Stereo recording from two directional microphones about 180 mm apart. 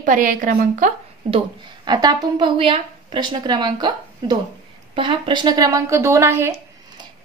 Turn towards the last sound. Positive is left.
turn(degrees=-15)  # may be behind; listen again after turning